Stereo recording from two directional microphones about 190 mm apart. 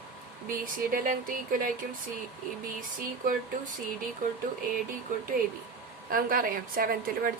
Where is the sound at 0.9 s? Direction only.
45° right (ahead or behind).